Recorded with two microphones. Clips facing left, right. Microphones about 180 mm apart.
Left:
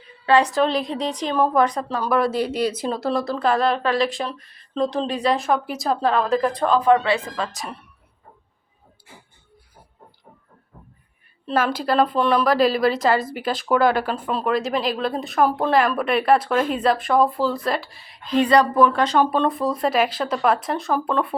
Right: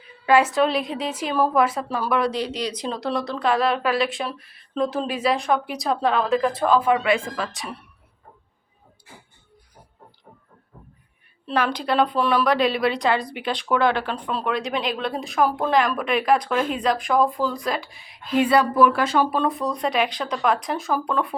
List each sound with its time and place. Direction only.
0.3 s speech: 5° right (ahead or behind)
6.9 s speech: 30° left (ahead or behind)
11.4 s speech: 5° left (ahead or behind)